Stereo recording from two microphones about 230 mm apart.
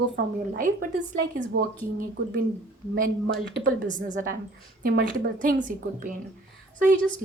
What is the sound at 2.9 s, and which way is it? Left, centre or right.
A woman's voice, right.